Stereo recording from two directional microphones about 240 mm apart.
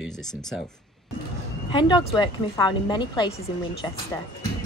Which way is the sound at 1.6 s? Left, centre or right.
Centre.